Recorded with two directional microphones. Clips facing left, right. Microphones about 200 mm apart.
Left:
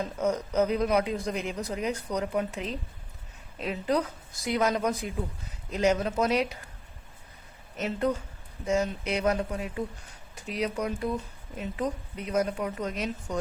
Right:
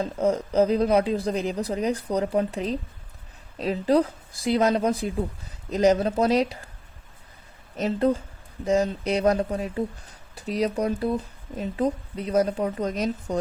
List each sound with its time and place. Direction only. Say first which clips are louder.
0.0 s speech: right 5 dB; 30° right (ahead or behind)
7.8 s speech: right 5 dB; 35° right (ahead or behind)